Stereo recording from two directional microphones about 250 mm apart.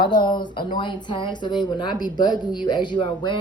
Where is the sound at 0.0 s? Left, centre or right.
Centre.